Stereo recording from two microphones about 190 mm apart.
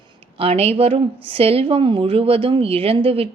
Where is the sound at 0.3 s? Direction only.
30° right (ahead or behind).